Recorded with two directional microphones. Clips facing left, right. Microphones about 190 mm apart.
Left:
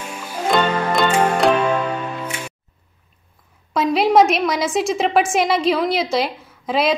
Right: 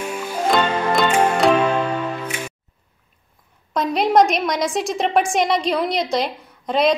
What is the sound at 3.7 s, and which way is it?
A woman's voice, 5° left (ahead or behind).